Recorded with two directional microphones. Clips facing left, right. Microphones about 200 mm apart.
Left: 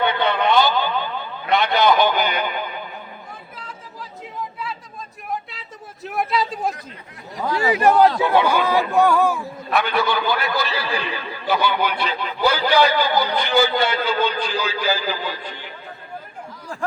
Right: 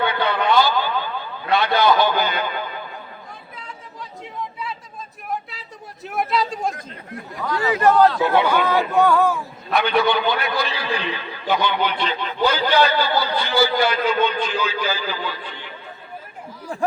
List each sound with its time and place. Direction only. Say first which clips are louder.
0.0 s a man's voice: left 1 dB; 20° left (ahead or behind)
4.6 s a sound: even; centre (ahead or behind)
7.4 s a man's voice: left 1 dB; 25° left (ahead or behind)